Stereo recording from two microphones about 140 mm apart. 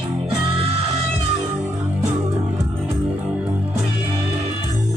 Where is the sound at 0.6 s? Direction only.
45° right (ahead or behind).